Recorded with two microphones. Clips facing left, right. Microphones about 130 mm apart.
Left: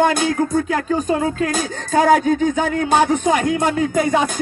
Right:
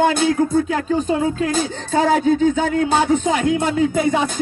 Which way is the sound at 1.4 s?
45° left (ahead or behind).